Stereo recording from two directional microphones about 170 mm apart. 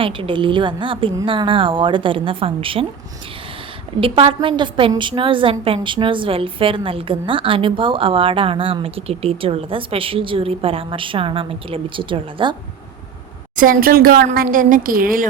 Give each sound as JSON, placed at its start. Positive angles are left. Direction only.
{"t": 0.0, "sound": "a woman's voice", "side_deg": -30}
{"t": 4.0, "sound": "a woman's voice", "side_deg": -35}
{"t": 13.6, "sound": "a woman's voice", "side_deg": -55}